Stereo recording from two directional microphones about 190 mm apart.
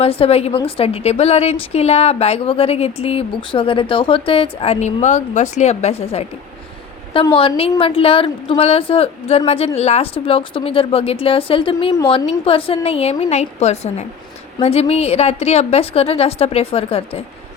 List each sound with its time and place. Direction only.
0.0 s a woman's voice: 30° left (ahead or behind)